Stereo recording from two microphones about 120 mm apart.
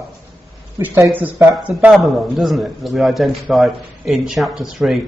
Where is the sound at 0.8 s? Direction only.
15° right (ahead or behind).